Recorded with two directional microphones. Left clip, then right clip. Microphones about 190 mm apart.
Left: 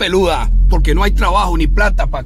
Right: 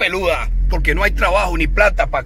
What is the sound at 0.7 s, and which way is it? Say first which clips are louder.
Speech: right 1 dB; 15° left (ahead or behind).